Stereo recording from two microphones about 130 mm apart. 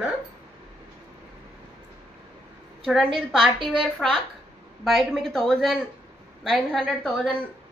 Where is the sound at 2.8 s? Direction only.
Centre (ahead or behind).